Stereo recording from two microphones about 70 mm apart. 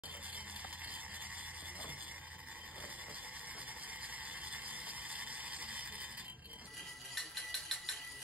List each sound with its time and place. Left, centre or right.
4.5 s mechanisms: right
7.2 s mechanisms: centre